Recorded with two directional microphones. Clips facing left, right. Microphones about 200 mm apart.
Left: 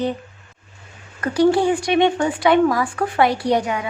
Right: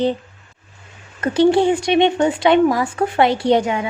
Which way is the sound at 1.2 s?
25° right (ahead or behind).